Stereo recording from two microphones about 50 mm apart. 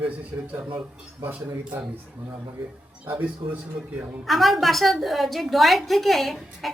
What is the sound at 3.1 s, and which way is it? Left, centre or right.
Speech, right.